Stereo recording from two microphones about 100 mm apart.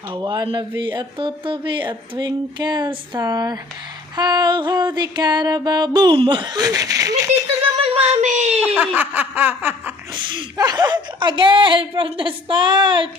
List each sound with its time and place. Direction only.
0.2 s speech: 45° right (ahead or behind)
0.8 s speech: 55° right (ahead or behind); by 7.3 s 35° right (ahead or behind)
7.9 s a sound: 90° right
8.6 s snicker: 15° right (ahead or behind)
10.2 s speech: 55° right (ahead or behind)
10.6 s a woman's voice: 45° right (ahead or behind)